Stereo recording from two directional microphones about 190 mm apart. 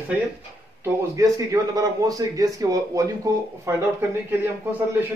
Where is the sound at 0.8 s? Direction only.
15° right (ahead or behind).